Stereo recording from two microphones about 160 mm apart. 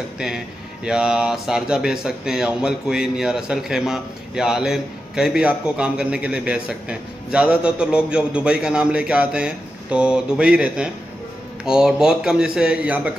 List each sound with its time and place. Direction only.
0.8 s a man's voice: 5° right (ahead or behind)